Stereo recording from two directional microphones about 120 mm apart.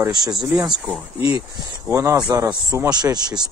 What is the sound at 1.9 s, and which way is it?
Speech, 25° right (ahead or behind).